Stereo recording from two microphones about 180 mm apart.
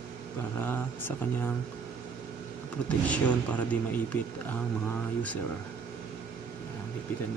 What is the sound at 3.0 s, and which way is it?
Speech, 10° left (ahead or behind).